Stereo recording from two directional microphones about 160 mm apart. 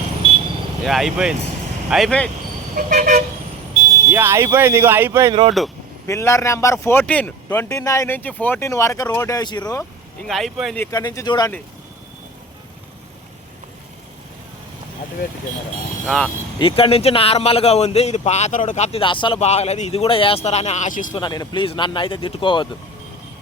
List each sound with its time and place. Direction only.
0.9 s speech: centre (ahead or behind)
2.7 s vehicle: 55° right (ahead or behind)
4.1 s speech: 15° right (ahead or behind)
5.3 s speech: 35° right (ahead or behind)
6.1 s speech: 20° left (ahead or behind)
10.2 s speech: centre (ahead or behind)
10.9 s speech: 20° left (ahead or behind)
16.0 s speech: 5° left (ahead or behind)
16.6 s speech: 35° left (ahead or behind); by 21.2 s 50° left (ahead or behind)
21.2 s speech: 25° left (ahead or behind)